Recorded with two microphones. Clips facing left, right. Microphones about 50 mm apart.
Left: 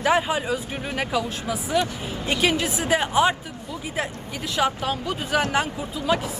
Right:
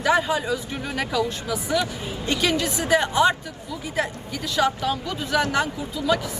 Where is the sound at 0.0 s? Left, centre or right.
Left.